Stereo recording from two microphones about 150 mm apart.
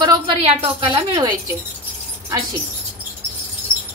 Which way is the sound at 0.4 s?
40° right (ahead or behind).